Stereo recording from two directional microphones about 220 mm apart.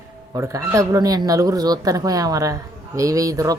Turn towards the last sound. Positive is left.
turn(degrees=-15)  # may be behind; listen again after turning